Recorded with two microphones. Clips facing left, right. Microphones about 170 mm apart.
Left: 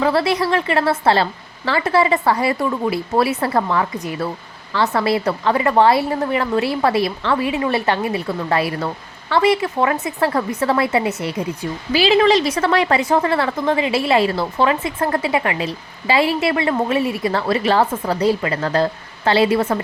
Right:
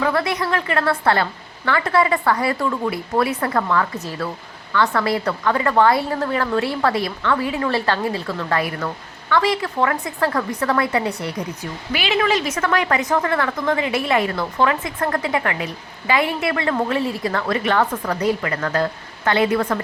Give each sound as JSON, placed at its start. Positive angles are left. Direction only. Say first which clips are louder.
{"t": 0.0, "sound": "a woman's voice", "louder": "left 3 dB", "side_deg": 30}